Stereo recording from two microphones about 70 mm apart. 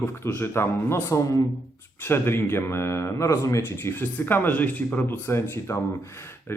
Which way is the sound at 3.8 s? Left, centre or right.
Left.